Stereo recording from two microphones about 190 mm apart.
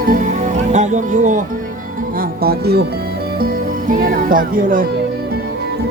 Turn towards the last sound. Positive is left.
turn(degrees=-45)  # may be behind; listen again after turning